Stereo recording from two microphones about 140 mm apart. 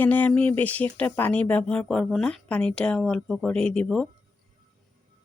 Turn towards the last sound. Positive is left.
turn(degrees=5)  # may be behind; listen again after turning